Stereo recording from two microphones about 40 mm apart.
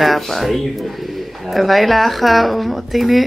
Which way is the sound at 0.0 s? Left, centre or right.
Centre.